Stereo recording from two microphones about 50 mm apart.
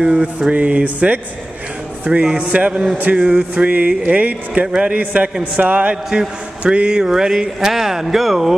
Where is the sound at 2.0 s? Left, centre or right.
Right.